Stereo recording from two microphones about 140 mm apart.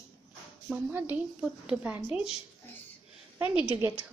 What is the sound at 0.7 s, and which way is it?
Speech, 15° right (ahead or behind).